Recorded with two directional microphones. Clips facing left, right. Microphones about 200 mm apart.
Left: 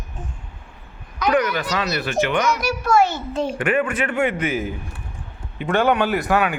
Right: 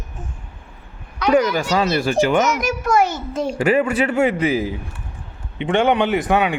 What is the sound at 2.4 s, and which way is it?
Speech, 20° right (ahead or behind).